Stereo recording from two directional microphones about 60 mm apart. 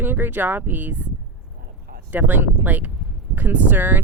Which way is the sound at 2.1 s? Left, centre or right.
Right.